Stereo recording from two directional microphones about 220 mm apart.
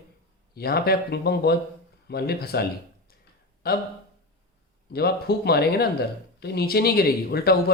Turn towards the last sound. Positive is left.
turn(degrees=45)  # may be behind; listen again after turning